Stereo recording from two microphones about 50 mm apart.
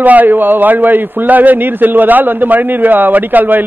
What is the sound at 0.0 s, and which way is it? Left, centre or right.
A man's voice, right.